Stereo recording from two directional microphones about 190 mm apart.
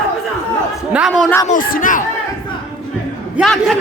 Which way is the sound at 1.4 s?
45° left (ahead or behind).